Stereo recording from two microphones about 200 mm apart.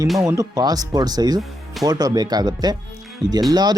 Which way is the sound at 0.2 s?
15° right (ahead or behind).